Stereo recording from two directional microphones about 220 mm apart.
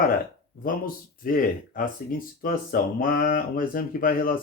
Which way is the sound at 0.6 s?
40° left (ahead or behind).